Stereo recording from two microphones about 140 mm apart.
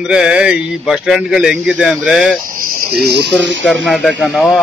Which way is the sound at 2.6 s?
90° right.